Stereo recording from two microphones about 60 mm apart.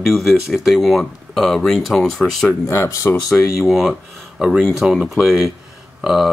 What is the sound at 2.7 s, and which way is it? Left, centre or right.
Speech, left.